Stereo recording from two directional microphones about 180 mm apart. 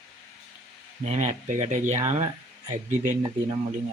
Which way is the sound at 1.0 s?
40° right (ahead or behind).